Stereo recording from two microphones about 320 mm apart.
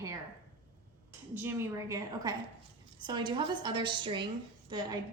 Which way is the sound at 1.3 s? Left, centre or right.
Centre.